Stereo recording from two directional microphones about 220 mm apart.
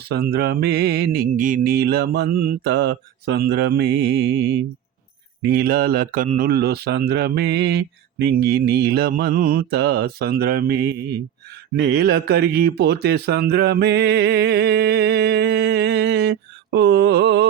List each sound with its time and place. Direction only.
0.1 s speech: 45° right (ahead or behind)
5.5 s speech: 45° right (ahead or behind)